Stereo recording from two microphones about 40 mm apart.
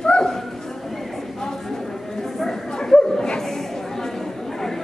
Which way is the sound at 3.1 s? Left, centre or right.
Centre.